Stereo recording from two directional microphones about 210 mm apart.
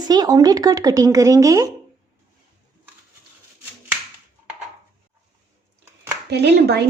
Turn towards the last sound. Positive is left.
turn(degrees=-50)  # may be behind; listen again after turning